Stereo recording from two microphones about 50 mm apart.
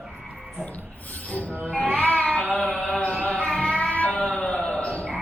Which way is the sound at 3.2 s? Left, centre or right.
Left.